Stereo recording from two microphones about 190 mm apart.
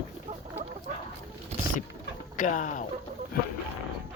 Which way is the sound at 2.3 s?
40° left (ahead or behind).